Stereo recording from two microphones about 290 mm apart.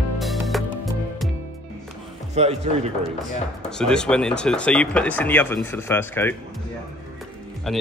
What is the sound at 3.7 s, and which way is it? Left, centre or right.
Speech, centre.